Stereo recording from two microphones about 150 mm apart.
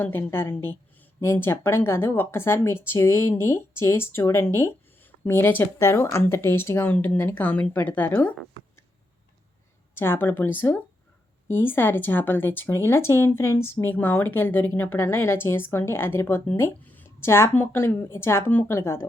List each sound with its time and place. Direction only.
0.0 s speech: 15° left (ahead or behind)
9.9 s speech: 15° left (ahead or behind)